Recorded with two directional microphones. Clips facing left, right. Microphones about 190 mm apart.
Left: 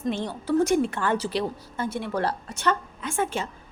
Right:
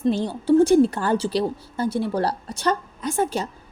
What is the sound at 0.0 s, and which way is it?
A woman's voice, 35° right (ahead or behind).